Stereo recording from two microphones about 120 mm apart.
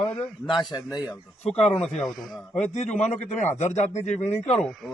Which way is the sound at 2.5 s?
70° left (ahead or behind).